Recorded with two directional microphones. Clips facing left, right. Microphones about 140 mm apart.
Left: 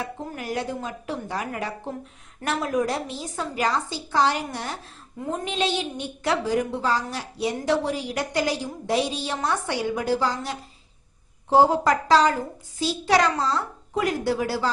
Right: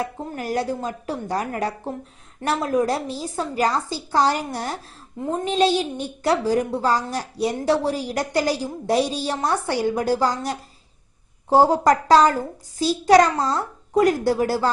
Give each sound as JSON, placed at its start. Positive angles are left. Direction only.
{"t": 0.3, "sound": "a woman's voice", "side_deg": -35}